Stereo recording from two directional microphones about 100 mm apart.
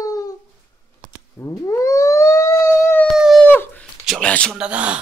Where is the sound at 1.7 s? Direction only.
30° left (ahead or behind).